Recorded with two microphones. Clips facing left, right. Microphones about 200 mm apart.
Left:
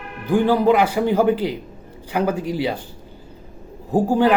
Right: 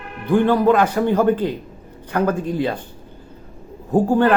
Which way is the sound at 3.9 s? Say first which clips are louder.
Right 1 dB; 10° left (ahead or behind).